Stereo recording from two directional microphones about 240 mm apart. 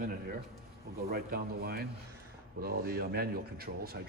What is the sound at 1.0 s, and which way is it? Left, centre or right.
Speech, right.